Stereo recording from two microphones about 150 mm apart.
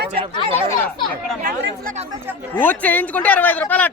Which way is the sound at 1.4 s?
60° right (ahead or behind).